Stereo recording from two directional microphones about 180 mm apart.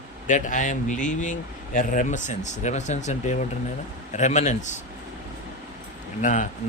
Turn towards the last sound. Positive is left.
turn(degrees=45)  # may be behind; listen again after turning